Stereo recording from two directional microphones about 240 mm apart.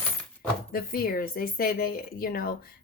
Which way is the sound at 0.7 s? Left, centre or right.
Left.